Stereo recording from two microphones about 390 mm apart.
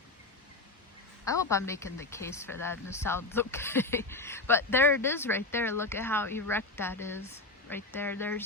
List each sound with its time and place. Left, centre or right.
1.3 s speech: centre